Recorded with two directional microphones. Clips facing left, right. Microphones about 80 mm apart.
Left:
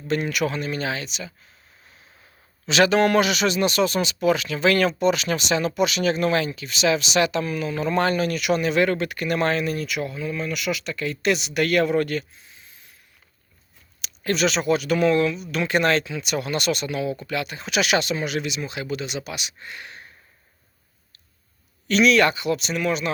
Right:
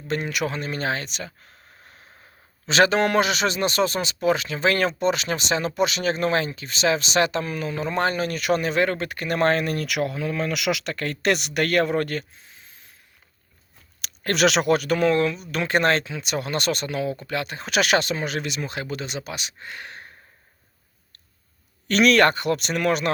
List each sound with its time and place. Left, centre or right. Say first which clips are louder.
0.1 s speech: left 2 dB; right
2.6 s speech: left 1 dB; right
14.0 s speech: right 2 dB; right
14.8 s speech: left 1 dB; right
21.8 s speech: even; right